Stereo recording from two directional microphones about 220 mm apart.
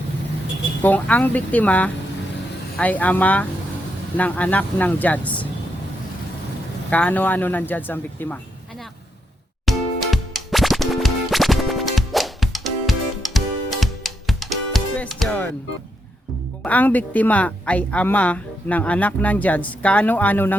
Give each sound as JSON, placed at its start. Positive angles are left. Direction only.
{"t": 0.8, "sound": "speech", "side_deg": 5}
{"t": 6.9, "sound": "speech", "side_deg": 5}
{"t": 9.6, "sound": "music", "side_deg": 0}
{"t": 16.6, "sound": "speech", "side_deg": 5}